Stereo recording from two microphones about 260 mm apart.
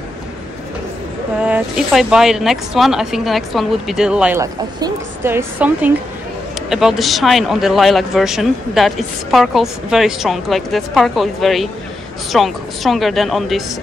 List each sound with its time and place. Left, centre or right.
1.4 s speech: centre